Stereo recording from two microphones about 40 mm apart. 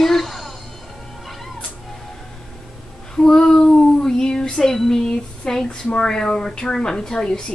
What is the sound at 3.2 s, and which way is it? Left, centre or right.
Child singing, centre.